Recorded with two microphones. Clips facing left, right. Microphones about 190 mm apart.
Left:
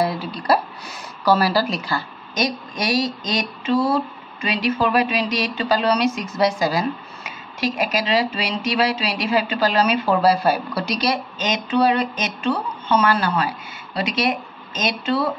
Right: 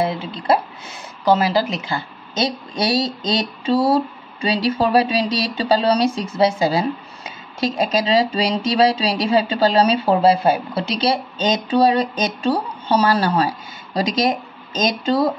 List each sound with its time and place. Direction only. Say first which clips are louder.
0.0 s a woman's voice: right 1 dB; 25° right (ahead or behind)